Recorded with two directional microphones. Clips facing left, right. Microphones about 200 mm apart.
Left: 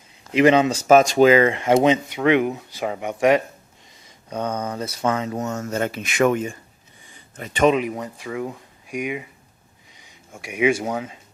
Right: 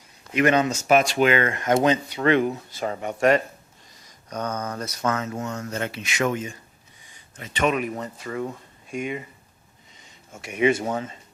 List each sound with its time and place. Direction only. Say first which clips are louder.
0.3 s speech: left 5 dB; 25° left (ahead or behind)
4.3 s speech: left 3 dB; 30° left (ahead or behind)
4.6 s speech: left 3 dB; 10° left (ahead or behind)
4.9 s speech: left 3 dB; 30° left (ahead or behind); by 7.7 s 50° left (ahead or behind)
7.7 s speech: left 5 dB; 15° left (ahead or behind)
10.3 s speech: left 1 dB; 10° left (ahead or behind)